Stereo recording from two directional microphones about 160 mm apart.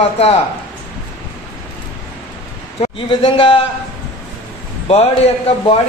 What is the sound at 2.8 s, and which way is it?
Speech, 35° left (ahead or behind).